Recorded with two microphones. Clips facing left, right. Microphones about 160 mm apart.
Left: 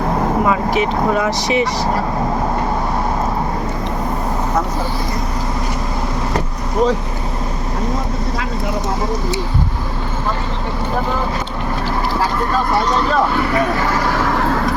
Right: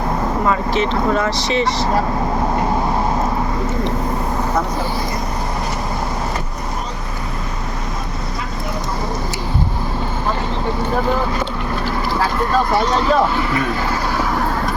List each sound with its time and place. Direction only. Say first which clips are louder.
0.4 s speech: left 1 dB; 10° left (ahead or behind)